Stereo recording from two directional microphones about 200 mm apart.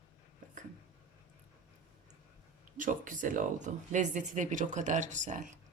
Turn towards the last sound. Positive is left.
turn(degrees=-40)  # may be behind; listen again after turning